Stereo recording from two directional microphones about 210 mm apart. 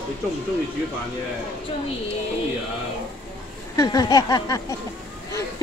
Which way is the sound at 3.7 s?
15° left (ahead or behind).